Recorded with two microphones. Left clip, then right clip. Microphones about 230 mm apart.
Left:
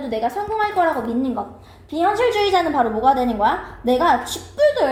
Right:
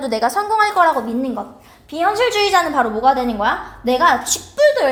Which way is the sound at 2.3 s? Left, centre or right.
Right.